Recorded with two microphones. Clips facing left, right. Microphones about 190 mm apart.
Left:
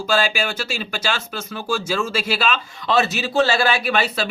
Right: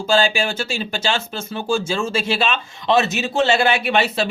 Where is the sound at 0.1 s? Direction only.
30° right (ahead or behind).